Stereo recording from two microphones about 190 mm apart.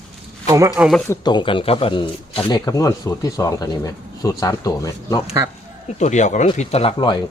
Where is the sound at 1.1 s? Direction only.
25° left (ahead or behind).